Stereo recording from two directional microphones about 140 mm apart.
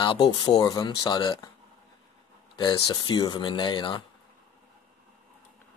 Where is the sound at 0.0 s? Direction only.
35° left (ahead or behind).